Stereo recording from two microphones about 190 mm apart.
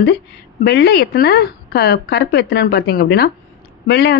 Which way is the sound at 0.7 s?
60° left (ahead or behind).